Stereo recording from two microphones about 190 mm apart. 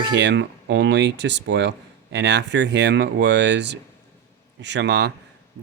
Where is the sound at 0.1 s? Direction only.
65° right (ahead or behind).